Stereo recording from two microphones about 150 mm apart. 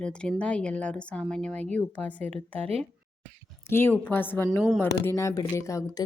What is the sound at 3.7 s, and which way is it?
A woman's voice, 15° left (ahead or behind).